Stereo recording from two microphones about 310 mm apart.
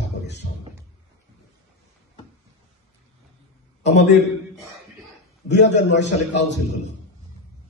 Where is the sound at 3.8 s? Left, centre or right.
Left.